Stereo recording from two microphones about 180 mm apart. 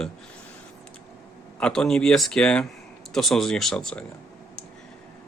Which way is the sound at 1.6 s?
5° left (ahead or behind).